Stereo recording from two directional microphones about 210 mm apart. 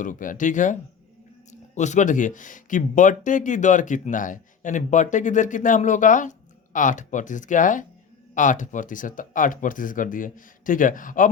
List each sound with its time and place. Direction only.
0.0 s speech: 40° left (ahead or behind)